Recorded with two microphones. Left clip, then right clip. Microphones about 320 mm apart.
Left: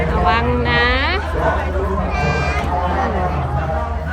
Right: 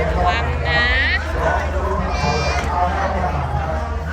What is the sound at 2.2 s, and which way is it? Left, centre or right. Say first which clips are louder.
Run: even; left.